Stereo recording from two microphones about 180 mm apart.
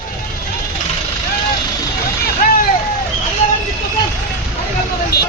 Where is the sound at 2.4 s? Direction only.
50° left (ahead or behind).